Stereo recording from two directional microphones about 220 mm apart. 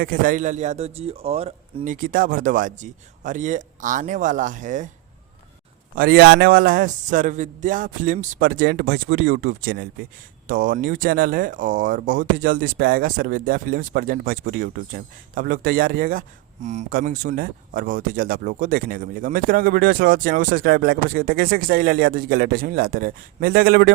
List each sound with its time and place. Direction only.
0.0 s a man's voice: 40° right (ahead or behind)
6.0 s a man's voice: 45° right (ahead or behind)